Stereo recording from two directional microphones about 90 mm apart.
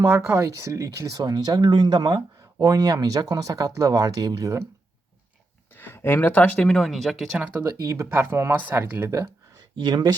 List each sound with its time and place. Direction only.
0.0 s speech: 25° right (ahead or behind)
1.2 s speech: 50° right (ahead or behind)
5.7 s speech: 25° left (ahead or behind)
6.7 s speech: centre (ahead or behind)
7.6 s speech: 40° right (ahead or behind)
8.1 s speech: 25° right (ahead or behind)
9.1 s a sound: 40° right (ahead or behind)
9.8 s speech: 50° right (ahead or behind)